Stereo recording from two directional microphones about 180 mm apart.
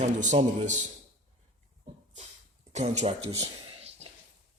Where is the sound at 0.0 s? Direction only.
40° right (ahead or behind).